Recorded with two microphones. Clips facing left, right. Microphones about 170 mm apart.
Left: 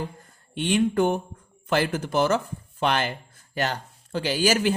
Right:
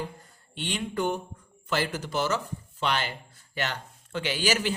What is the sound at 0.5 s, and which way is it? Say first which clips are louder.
Speech: left 9 dB; 50° left (ahead or behind).